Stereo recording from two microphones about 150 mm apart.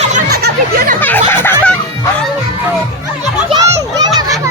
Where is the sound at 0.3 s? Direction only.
85° right.